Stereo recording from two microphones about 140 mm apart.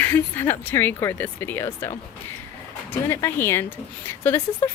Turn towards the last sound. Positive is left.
turn(degrees=15)  # may be behind; listen again after turning